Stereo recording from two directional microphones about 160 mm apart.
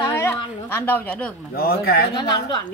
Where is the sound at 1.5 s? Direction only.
70° left (ahead or behind).